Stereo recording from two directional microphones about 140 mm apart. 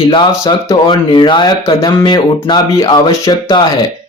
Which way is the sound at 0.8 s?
35° left (ahead or behind).